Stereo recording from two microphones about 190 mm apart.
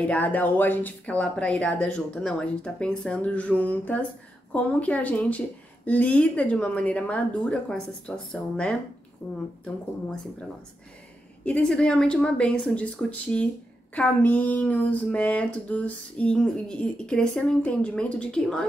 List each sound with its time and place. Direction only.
0.0 s speech: 10° left (ahead or behind)
11.4 s speech: 5° left (ahead or behind)